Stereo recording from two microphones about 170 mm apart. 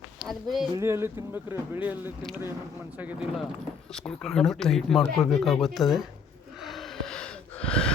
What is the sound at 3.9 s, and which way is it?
Speech, 5° left (ahead or behind).